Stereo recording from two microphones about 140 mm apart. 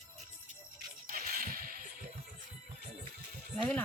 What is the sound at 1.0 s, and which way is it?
Whip, 90° right.